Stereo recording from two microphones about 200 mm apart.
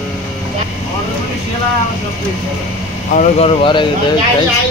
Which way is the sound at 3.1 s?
30° left (ahead or behind).